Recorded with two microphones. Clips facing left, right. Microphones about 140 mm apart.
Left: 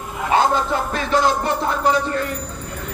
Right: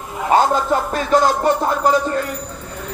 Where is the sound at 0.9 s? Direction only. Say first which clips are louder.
Right 2 dB; 45° right (ahead or behind).